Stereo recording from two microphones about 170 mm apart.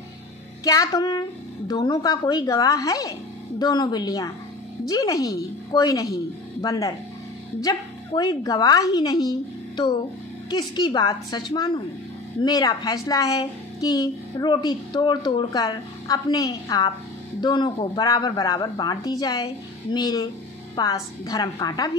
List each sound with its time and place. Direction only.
0.7 s a woman's voice: 20° left (ahead or behind)
10.5 s a woman's voice: 25° left (ahead or behind)